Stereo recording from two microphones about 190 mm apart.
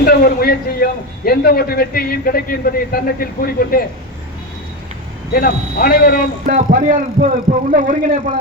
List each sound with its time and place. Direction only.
0.0 s speech: 50° left (ahead or behind)
5.3 s speech: 50° left (ahead or behind)
6.4 s speech: 45° right (ahead or behind)